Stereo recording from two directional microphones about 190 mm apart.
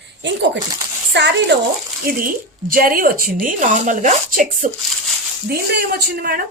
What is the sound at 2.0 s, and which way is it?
Speech, 50° right (ahead or behind).